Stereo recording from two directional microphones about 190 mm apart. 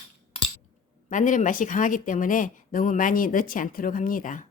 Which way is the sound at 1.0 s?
40° left (ahead or behind).